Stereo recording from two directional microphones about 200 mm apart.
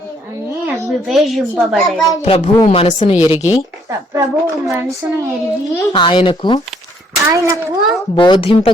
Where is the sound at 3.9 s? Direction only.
15° right (ahead or behind).